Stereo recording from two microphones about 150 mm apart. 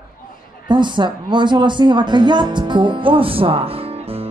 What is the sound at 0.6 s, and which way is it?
A woman's voice, 30° right (ahead or behind).